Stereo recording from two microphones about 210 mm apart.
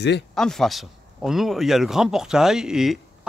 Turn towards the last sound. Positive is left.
turn(degrees=0)  # may be behind; listen again after turning